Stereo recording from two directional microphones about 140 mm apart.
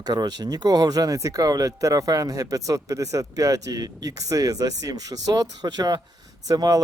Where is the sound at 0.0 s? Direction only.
30° right (ahead or behind).